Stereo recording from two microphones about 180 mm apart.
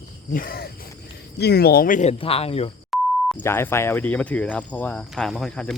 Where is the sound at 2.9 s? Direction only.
Centre (ahead or behind).